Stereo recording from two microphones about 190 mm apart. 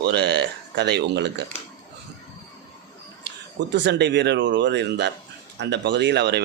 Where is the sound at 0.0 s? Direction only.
60° right (ahead or behind).